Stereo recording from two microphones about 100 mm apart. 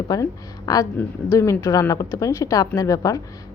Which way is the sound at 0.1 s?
40° left (ahead or behind).